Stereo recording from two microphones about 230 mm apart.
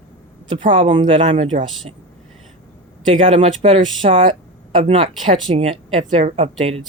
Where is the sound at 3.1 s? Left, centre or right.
Right.